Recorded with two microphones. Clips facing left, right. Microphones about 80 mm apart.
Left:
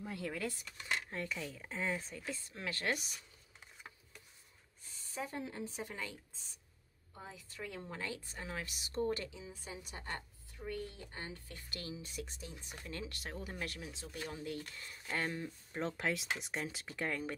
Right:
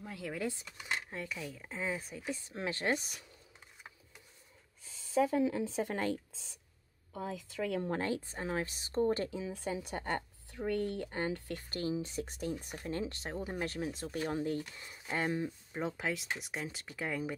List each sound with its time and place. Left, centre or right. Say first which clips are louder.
0.0 s speech: even; centre
0.4 s speech: right 3 dB; centre
5.3 s speech: right 11 dB; right
7.2 s speech: right 10 dB; right
7.8 s speech: right 9 dB; right
9.4 s a woman's voice: right 11 dB; right
9.8 s speech: right 8 dB; right
11.7 s speech: right 9 dB; right
12.3 s speech: right 12 dB; right
12.7 s speech: right 8 dB; right
14.6 s speech: right 3 dB; centre
15.7 s speech: left 1 dB; centre